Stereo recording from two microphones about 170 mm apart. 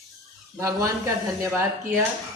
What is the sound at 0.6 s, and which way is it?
Speech, 20° right (ahead or behind).